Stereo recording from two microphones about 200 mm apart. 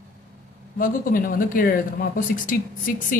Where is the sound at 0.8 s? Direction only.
45° left (ahead or behind).